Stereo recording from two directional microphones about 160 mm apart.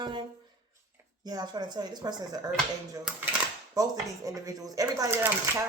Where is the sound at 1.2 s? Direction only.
25° right (ahead or behind).